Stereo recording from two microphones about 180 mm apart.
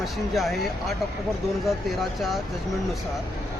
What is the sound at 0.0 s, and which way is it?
Speech, centre (ahead or behind).